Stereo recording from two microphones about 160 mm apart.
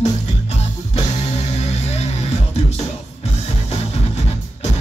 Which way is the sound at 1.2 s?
40° left (ahead or behind).